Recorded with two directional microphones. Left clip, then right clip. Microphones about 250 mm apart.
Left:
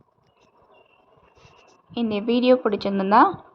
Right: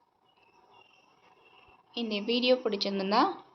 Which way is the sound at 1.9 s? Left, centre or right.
Left.